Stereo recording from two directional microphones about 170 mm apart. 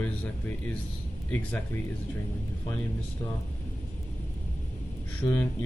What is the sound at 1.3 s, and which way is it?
Speech, 10° left (ahead or behind).